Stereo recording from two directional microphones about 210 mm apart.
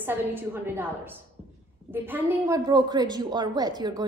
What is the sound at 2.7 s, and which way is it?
Speech, 20° right (ahead or behind).